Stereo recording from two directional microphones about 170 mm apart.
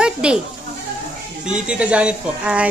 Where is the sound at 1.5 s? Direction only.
5° right (ahead or behind).